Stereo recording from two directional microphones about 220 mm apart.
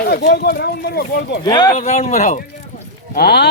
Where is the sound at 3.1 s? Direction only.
45° left (ahead or behind).